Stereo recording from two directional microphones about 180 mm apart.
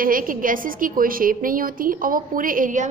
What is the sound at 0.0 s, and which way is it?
A woman's voice, 50° right (ahead or behind).